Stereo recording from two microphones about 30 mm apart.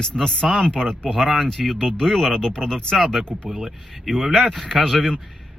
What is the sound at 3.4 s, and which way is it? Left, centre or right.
Speech, centre.